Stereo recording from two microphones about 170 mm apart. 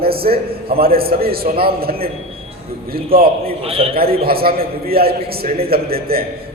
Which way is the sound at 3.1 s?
60° right (ahead or behind).